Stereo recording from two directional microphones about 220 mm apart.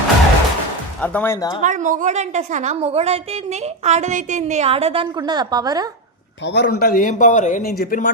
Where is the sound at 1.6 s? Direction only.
35° right (ahead or behind); by 5.9 s 15° right (ahead or behind).